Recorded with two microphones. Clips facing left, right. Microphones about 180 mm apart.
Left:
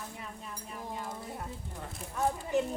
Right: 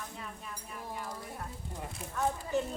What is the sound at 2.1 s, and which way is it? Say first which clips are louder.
Speech: left 2 dB; 20° left (ahead or behind).